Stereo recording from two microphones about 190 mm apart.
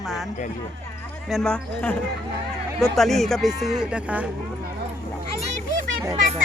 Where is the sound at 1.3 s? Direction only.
Centre (ahead or behind).